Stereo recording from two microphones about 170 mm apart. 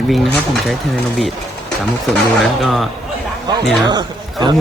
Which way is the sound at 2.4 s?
Centre (ahead or behind).